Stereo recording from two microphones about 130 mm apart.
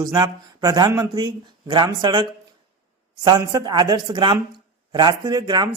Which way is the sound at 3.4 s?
30° right (ahead or behind).